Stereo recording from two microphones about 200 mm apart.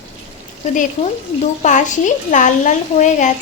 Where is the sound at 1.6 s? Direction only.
40° left (ahead or behind).